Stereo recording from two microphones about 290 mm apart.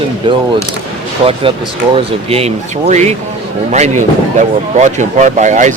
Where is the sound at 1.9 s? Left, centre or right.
Centre.